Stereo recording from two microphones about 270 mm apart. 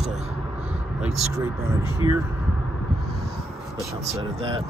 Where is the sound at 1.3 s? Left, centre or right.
Centre.